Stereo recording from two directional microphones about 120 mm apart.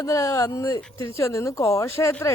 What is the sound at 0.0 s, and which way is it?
Speech, 25° left (ahead or behind).